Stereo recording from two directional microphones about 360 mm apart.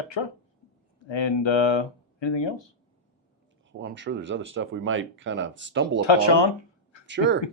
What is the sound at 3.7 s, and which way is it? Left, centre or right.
Speech, right.